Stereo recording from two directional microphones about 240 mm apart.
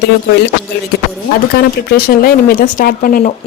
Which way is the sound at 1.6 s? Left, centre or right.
Left.